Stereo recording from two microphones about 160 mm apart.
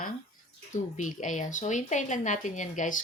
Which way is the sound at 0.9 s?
55° left (ahead or behind).